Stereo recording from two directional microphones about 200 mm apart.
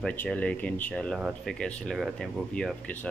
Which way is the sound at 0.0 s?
5° left (ahead or behind).